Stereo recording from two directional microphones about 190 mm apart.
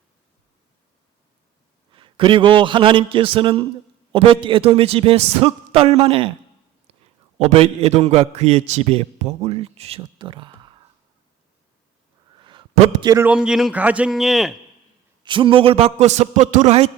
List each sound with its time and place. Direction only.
1.9 s a man's voice: 25° right (ahead or behind)
7.3 s a man's voice: 35° right (ahead or behind)
12.4 s a sound: 25° right (ahead or behind)
13.0 s a man's voice: 15° right (ahead or behind); by 14.5 s centre (ahead or behind)
15.2 s a man's voice: 25° right (ahead or behind)